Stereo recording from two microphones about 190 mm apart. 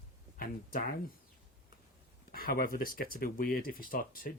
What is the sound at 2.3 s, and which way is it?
Speech, 50° left (ahead or behind).